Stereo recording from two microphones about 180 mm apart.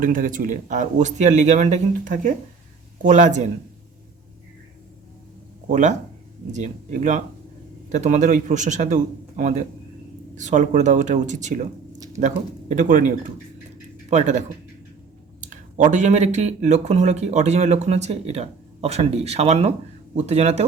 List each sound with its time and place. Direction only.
0.0 s speech: 50° right (ahead or behind)
6.5 s speech: 40° right (ahead or behind)
11.9 s a sound: 20° right (ahead or behind)
12.2 s speech: 45° right (ahead or behind)